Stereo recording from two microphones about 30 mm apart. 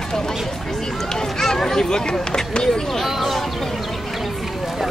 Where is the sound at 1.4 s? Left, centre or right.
Centre.